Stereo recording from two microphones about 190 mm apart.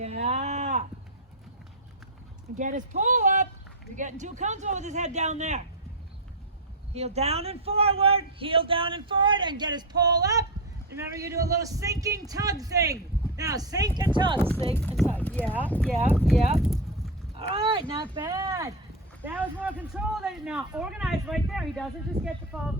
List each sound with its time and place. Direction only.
0.0 s a sound: 35° right (ahead or behind)
2.6 s speech: 45° right (ahead or behind)
6.9 s a man's voice: 35° right (ahead or behind)
15.0 s speech: 10° left (ahead or behind)
17.3 s speech: 25° right (ahead or behind); by 22.3 s centre (ahead or behind)